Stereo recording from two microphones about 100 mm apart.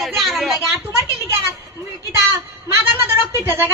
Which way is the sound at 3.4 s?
20° right (ahead or behind).